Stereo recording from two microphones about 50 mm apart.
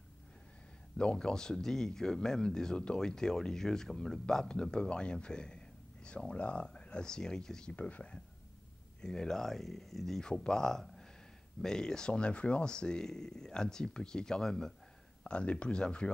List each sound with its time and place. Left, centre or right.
0.9 s speech: centre
7.7 s speech: left; by 14.7 s centre
15.2 s speech: left